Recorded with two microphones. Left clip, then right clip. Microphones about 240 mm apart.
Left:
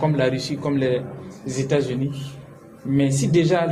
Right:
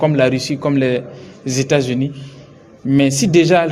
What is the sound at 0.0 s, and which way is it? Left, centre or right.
A man's voice, right.